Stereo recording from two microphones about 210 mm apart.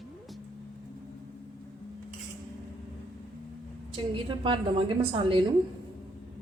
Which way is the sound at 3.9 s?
25° right (ahead or behind).